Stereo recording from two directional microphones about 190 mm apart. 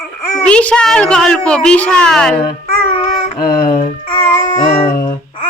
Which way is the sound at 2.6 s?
30° left (ahead or behind).